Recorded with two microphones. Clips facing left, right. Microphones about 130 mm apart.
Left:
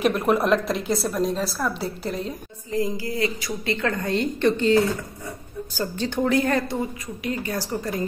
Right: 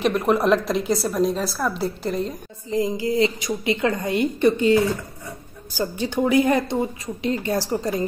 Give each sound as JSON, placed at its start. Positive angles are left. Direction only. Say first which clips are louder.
{"t": 0.0, "sound": "a woman's voice", "louder": "right 1 dB", "side_deg": 0}
{"t": 2.7, "sound": "a woman's voice", "louder": "right 4 dB", "side_deg": -20}
{"t": 5.8, "sound": "a woman's voice", "louder": "right 2 dB", "side_deg": -10}
{"t": 6.8, "sound": "a woman's voice", "louder": "right 4 dB", "side_deg": -30}